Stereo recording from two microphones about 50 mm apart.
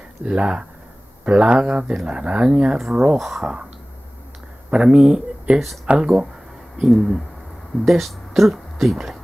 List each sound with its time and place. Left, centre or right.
0.2 s speech: centre
3.2 s speech: centre
4.6 s speech: centre
6.9 s speech: centre